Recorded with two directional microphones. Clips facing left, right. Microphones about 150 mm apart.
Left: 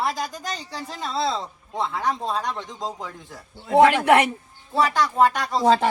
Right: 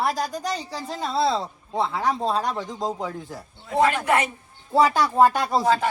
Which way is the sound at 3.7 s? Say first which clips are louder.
Left 5 dB; 80° left.